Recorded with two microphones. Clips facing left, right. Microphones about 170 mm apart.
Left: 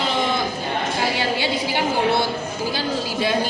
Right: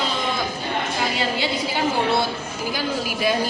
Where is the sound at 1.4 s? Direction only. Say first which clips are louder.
Left 1 dB; 25° left (ahead or behind).